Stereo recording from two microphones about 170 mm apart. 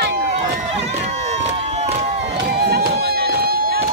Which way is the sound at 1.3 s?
40° right (ahead or behind).